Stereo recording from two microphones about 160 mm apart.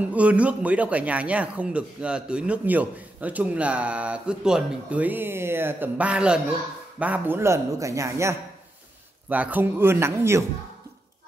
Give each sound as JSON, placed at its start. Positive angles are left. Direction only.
{"t": 0.0, "sound": "speech", "side_deg": -10}